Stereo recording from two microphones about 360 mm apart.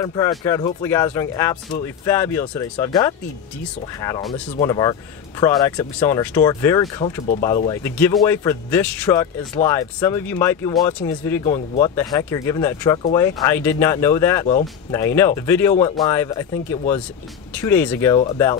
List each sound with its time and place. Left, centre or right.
0.0 s a man's voice: centre
17.6 s a man's voice: centre